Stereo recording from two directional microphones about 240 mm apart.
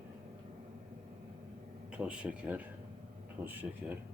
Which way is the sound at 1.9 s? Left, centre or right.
Centre.